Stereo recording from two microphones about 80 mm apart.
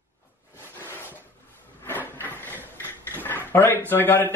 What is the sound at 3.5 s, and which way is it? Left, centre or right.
Speech, left.